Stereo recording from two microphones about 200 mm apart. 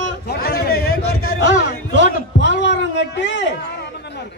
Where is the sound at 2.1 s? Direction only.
60° left (ahead or behind).